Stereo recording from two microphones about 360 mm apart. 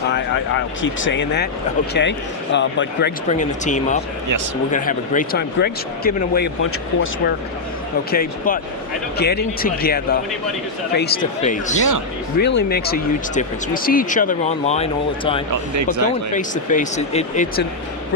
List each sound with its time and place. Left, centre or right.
0.1 s speech: left
8.1 s speech: left
11.8 s speech: right
12.4 s speech: left
15.7 s speech: right
16.3 s speech: left